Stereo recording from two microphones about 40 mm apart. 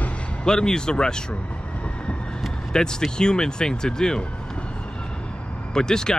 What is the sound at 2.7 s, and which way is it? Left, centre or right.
Speech, centre.